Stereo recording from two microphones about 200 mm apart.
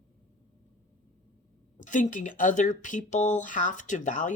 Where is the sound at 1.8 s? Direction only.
40° left (ahead or behind).